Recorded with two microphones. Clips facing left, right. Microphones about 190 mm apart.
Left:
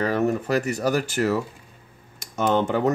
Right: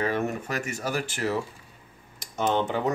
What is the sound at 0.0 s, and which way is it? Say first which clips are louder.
Speech: left 5 dB; 35° left (ahead or behind).